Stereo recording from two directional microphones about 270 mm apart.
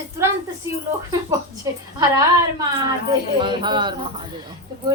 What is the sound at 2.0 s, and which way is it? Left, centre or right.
A woman's voice, centre.